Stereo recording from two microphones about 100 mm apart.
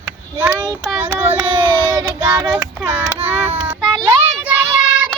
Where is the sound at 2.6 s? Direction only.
15° right (ahead or behind).